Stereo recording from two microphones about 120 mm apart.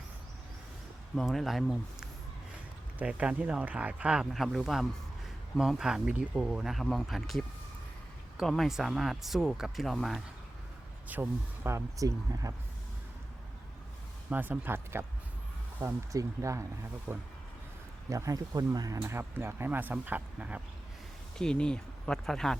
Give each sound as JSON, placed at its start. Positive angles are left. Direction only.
{"t": 1.1, "sound": "speech", "side_deg": 0}
{"t": 11.1, "sound": "speech", "side_deg": -20}
{"t": 14.3, "sound": "speech", "side_deg": -15}
{"t": 17.1, "sound": "speech", "side_deg": -5}
{"t": 18.1, "sound": "speech", "side_deg": -25}
{"t": 21.3, "sound": "speech", "side_deg": 5}